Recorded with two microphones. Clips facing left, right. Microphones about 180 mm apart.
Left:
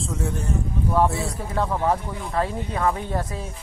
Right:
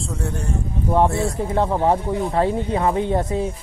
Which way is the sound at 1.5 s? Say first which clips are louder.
Right 3 dB; 30° right (ahead or behind).